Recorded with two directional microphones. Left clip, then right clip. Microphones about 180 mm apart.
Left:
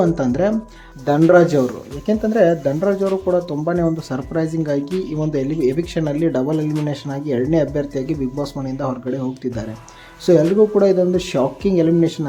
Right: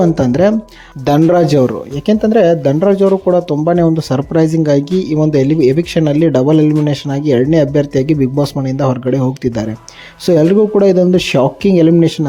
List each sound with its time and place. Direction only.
0.0 s speech: 35° right (ahead or behind)